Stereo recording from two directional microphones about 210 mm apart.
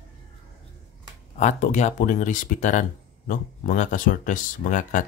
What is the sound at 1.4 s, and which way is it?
Speech, 35° left (ahead or behind).